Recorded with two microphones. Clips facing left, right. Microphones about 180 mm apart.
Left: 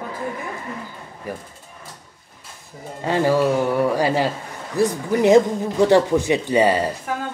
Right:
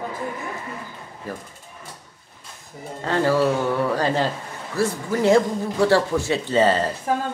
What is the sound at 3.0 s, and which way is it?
Speech, 15° left (ahead or behind).